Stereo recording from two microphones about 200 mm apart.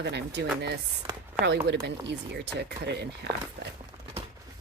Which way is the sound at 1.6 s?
60° right (ahead or behind).